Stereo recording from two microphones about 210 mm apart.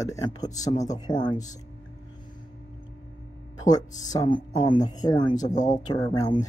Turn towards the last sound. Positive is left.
turn(degrees=20)  # may be behind; listen again after turning